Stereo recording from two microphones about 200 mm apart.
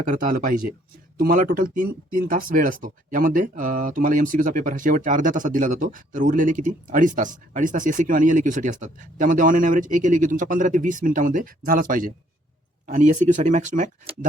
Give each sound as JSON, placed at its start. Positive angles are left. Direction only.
{"t": 0.0, "sound": "speech", "side_deg": -45}